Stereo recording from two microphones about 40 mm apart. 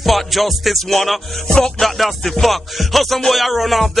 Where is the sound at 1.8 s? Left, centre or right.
Centre.